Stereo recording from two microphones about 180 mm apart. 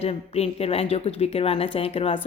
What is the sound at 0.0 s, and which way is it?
A woman's voice, 35° left (ahead or behind).